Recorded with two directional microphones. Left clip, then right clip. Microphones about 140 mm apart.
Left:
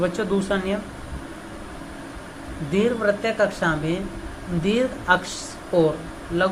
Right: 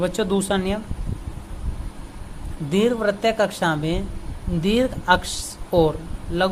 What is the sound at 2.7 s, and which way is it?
Speech, 65° right (ahead or behind).